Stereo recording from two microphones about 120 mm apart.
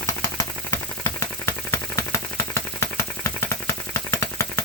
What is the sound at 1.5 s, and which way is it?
Engine, 20° left (ahead or behind).